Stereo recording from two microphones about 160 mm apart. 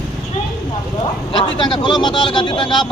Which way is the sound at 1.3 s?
30° left (ahead or behind).